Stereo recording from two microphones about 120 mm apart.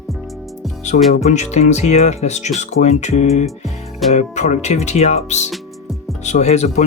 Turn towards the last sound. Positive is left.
turn(degrees=70)  # may be behind; listen again after turning